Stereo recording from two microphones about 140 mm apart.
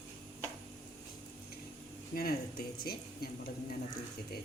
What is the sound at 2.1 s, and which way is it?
Speech, 90° left.